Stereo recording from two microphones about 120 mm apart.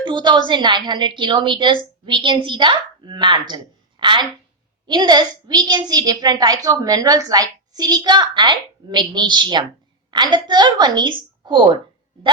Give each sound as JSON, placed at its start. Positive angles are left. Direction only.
{"t": 0.0, "sound": "a woman's voice", "side_deg": -40}